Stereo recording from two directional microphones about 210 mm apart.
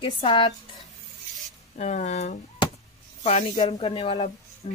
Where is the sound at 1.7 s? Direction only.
35° left (ahead or behind).